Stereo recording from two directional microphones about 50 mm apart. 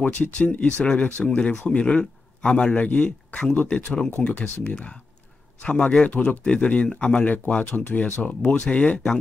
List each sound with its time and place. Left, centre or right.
0.0 s speech: left